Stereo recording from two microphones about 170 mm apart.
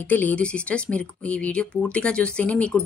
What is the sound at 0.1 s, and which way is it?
A woman's voice, 10° left (ahead or behind).